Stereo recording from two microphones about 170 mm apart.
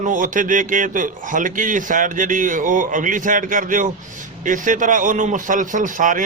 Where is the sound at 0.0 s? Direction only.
50° right (ahead or behind).